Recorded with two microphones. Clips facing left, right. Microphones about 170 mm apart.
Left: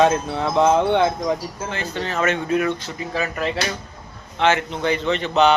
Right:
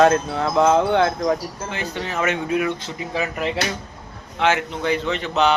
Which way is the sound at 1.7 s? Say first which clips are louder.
Left 1 dB; 15° right (ahead or behind).